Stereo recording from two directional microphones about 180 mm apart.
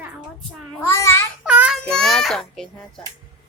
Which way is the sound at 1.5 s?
5° right (ahead or behind).